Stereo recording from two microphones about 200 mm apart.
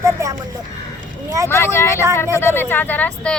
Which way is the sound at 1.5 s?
10° left (ahead or behind).